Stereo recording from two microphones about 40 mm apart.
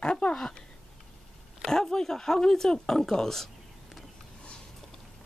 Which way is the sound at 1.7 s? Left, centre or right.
Centre.